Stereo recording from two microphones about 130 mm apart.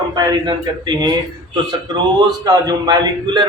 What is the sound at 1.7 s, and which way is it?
A man's voice, 30° right (ahead or behind).